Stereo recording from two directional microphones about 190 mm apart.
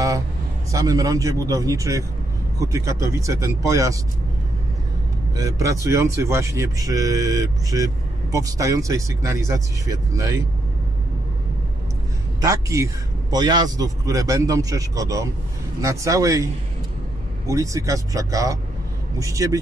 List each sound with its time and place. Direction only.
0.7 s speech: 15° right (ahead or behind)
5.3 s speech: 15° right (ahead or behind)
12.4 s speech: 15° right (ahead or behind)
17.5 s speech: 15° right (ahead or behind)